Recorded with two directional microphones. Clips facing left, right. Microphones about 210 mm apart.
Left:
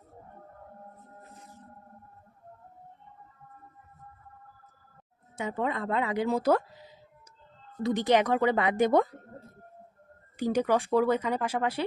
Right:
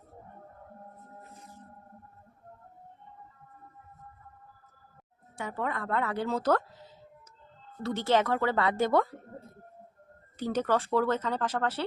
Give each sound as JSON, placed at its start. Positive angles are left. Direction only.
{"t": 5.4, "sound": "a woman's voice", "side_deg": 20}
{"t": 10.3, "sound": "a woman's voice", "side_deg": 15}